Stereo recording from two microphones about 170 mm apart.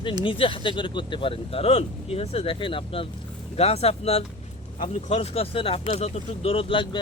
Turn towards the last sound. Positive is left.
turn(degrees=30)  # may be behind; listen again after turning